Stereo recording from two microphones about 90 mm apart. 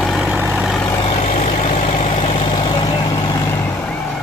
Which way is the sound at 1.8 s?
90° left.